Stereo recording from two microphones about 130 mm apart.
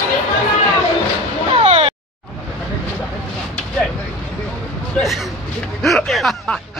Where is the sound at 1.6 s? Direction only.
50° right (ahead or behind).